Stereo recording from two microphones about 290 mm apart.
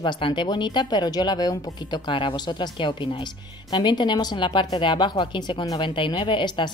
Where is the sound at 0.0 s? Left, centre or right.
Centre.